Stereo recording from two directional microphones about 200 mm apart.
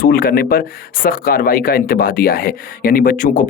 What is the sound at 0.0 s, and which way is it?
Speech, 50° left (ahead or behind).